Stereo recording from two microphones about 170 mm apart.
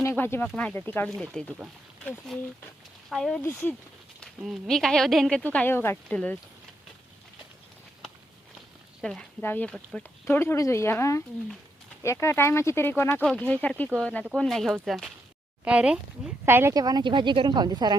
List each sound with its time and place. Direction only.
0.0 s speech: 15° left (ahead or behind)
3.4 s speech: 10° left (ahead or behind)
4.2 s speech: centre (ahead or behind)
9.0 s speech: centre (ahead or behind); by 17.9 s 25° right (ahead or behind)